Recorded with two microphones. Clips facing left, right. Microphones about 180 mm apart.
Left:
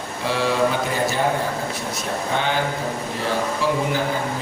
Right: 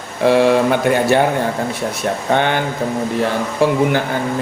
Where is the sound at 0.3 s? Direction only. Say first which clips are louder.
Right 8 dB; 60° right (ahead or behind).